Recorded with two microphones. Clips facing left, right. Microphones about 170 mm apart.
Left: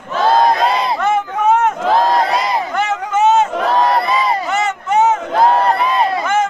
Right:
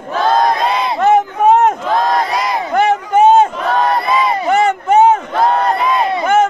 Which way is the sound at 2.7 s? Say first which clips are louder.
Right 8 dB; 35° right (ahead or behind).